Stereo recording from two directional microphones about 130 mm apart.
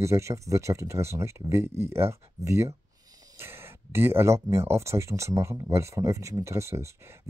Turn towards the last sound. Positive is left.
turn(degrees=-20)  # may be behind; listen again after turning